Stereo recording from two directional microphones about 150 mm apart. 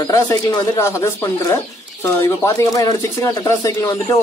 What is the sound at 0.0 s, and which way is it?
Speech, 20° left (ahead or behind).